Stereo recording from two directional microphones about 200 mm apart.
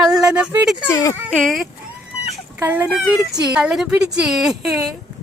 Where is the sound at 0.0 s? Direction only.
5° right (ahead or behind).